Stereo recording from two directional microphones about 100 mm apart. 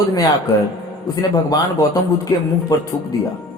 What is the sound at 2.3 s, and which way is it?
Speech, 30° left (ahead or behind).